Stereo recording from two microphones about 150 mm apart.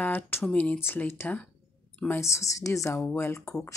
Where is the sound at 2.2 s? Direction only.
20° left (ahead or behind).